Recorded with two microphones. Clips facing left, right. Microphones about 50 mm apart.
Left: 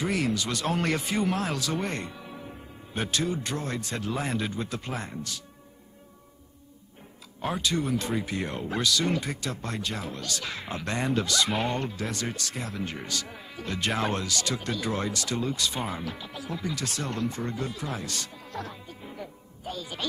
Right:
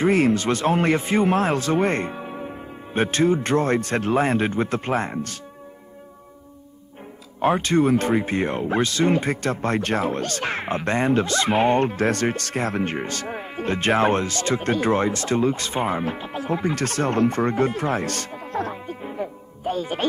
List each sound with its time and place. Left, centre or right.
0.0 s speech: right
7.4 s speech: right